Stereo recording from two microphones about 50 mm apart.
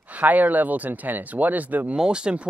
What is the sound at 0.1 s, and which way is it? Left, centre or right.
Speech, right.